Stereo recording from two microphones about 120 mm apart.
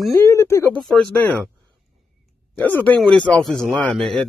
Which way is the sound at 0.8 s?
5° left (ahead or behind).